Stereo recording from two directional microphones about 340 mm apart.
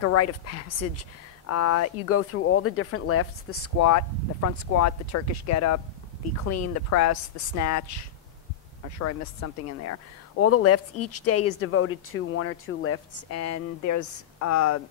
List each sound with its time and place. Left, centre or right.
0.0 s speech: left